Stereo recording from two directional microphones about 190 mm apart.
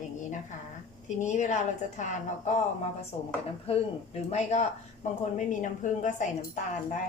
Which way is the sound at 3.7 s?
30° left (ahead or behind).